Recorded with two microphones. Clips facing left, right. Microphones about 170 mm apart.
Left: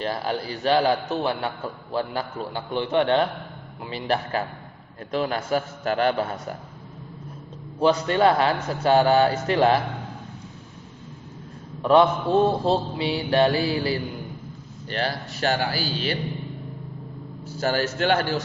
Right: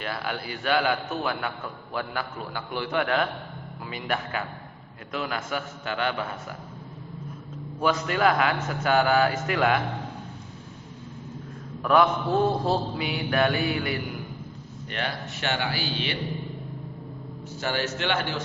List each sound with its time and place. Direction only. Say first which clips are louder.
0.0 s a man's voice: left 5 dB; 35° left (ahead or behind)
2.7 s mantra: left 5 dB; 25° left (ahead or behind)
3.8 s a man's voice: left 5 dB; 30° left (ahead or behind)
7.8 s mantra: left 5 dB; 30° left (ahead or behind)
8.7 s a man's voice: left 5 dB; 30° left (ahead or behind)
11.8 s mantra: left 4 dB; 25° left (ahead or behind)
14.8 s a man's voice: left 4 dB; 35° left (ahead or behind)
17.6 s a man's voice: left 5 dB; 40° left (ahead or behind)